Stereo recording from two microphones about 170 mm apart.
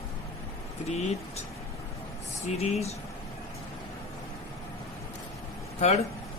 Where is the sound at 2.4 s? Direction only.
40° left (ahead or behind).